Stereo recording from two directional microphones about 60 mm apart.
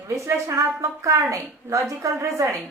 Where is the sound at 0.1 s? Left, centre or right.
Right.